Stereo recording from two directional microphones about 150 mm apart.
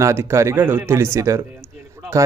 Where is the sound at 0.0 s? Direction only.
15° right (ahead or behind).